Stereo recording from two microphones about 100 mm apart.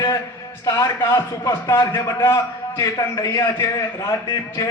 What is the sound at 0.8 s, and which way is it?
Speech, 45° left (ahead or behind).